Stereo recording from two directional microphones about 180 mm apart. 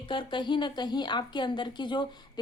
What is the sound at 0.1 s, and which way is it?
Speech, 25° left (ahead or behind).